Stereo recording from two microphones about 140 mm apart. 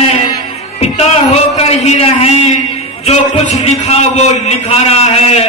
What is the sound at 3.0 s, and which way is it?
A man's voice, 50° left (ahead or behind).